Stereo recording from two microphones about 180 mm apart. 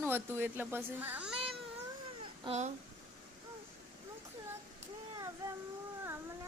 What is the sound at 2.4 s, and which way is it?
Speech, 40° right (ahead or behind).